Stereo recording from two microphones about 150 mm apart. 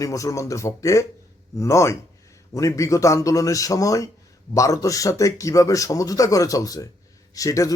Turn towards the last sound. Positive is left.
turn(degrees=20)  # may be behind; listen again after turning